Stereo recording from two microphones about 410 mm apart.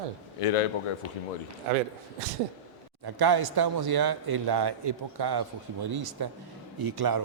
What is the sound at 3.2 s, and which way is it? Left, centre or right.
A man's voice, right.